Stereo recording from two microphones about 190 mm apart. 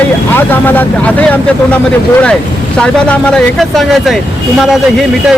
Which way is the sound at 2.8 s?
5° left (ahead or behind).